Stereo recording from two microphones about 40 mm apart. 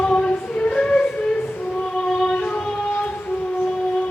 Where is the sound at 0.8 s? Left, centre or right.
Centre.